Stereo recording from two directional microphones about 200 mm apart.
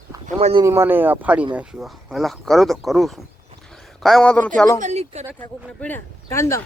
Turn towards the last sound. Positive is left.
turn(degrees=15)  # may be behind; listen again after turning